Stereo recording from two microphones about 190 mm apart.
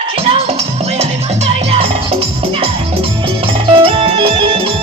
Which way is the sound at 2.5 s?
30° right (ahead or behind).